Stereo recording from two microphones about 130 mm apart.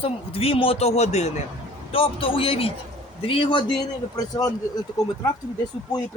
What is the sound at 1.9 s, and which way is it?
Speech, 45° left (ahead or behind).